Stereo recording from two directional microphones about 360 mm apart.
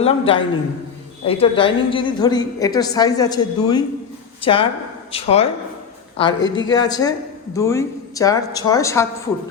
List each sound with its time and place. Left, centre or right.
0.0 s a woman's voice: centre